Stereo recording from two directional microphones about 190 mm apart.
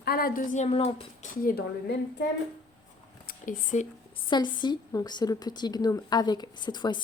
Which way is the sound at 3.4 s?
45° left (ahead or behind).